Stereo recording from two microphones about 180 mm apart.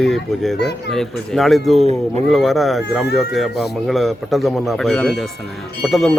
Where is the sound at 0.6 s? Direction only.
65° left (ahead or behind).